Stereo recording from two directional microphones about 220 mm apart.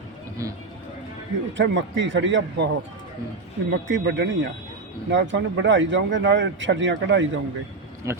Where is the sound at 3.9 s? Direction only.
55° right (ahead or behind).